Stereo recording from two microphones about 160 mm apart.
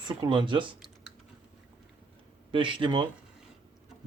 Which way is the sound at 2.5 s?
30° right (ahead or behind).